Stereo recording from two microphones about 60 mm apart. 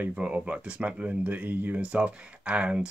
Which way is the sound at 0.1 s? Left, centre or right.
Centre.